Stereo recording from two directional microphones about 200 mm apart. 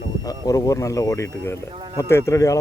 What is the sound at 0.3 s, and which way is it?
Speech, 15° left (ahead or behind).